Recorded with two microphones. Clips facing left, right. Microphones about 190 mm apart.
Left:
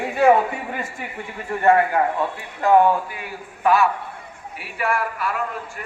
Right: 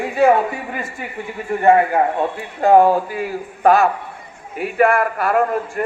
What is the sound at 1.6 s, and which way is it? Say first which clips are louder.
A man's voice: right 3 dB; 25° right (ahead or behind).